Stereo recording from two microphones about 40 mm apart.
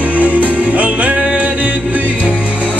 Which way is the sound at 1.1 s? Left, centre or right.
Right.